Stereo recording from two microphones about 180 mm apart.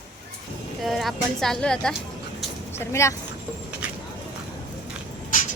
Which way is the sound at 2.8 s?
15° left (ahead or behind).